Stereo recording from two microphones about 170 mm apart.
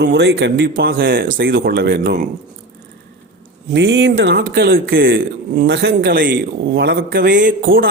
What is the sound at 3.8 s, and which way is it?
Speech, 90° right.